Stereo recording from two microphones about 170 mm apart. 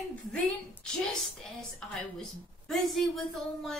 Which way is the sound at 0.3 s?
5° left (ahead or behind).